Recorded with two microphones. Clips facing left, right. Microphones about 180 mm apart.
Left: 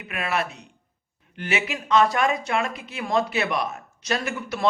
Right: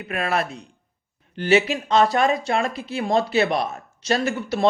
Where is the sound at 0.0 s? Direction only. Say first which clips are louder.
Right 3 dB; 40° right (ahead or behind).